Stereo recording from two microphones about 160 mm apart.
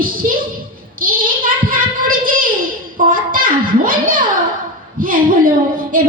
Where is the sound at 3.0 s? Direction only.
60° right (ahead or behind).